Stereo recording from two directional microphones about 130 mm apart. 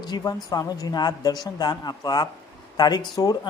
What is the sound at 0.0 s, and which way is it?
A woman's voice, 35° left (ahead or behind).